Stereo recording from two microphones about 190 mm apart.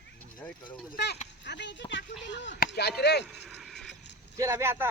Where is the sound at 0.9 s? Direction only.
60° left (ahead or behind).